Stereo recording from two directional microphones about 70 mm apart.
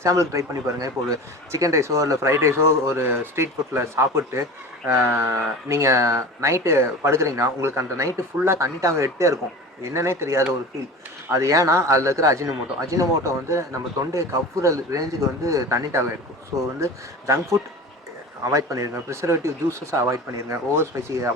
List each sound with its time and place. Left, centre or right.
0.0 s a man's voice: right
5.6 s a man's voice: right